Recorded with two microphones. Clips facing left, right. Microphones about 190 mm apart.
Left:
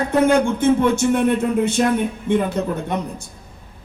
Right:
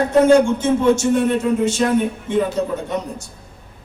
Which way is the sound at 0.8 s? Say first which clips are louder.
Right 2 dB; 55° left (ahead or behind).